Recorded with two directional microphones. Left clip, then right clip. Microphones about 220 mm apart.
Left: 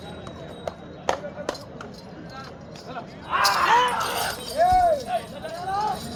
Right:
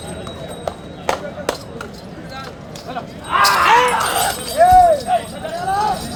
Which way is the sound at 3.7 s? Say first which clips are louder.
Right 6 dB; 20° right (ahead or behind).